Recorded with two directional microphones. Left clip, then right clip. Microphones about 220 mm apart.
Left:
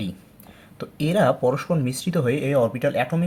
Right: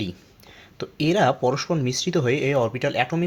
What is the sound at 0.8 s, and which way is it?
Speech, 30° right (ahead or behind).